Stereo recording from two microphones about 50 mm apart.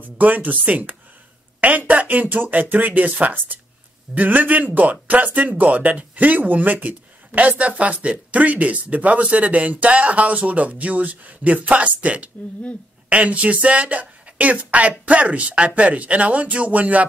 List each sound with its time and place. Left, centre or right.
0.2 s speech: right